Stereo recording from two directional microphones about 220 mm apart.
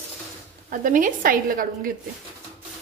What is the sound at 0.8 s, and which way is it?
Speech, 35° right (ahead or behind).